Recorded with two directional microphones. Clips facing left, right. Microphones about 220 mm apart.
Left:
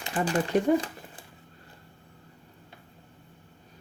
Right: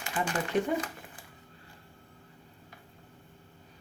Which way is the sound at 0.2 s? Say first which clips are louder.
Left 4 dB; 45° left (ahead or behind).